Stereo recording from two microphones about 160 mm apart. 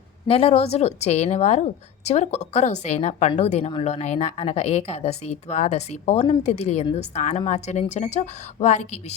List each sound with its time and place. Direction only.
0.3 s a woman's voice: 35° left (ahead or behind)